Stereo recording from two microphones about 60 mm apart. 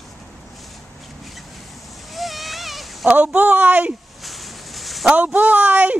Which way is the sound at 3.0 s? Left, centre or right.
Right.